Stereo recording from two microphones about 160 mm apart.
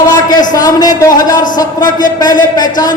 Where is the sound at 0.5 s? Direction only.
25° left (ahead or behind).